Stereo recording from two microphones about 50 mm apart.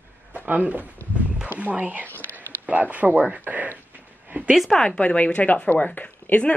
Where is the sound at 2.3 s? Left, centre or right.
Right.